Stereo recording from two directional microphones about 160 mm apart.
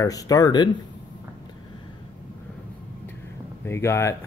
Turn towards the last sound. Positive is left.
turn(degrees=15)  # may be behind; listen again after turning